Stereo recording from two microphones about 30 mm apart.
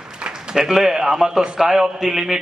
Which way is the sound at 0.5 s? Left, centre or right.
Right.